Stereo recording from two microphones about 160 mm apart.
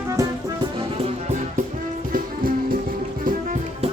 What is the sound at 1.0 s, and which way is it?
Music, 45° right (ahead or behind).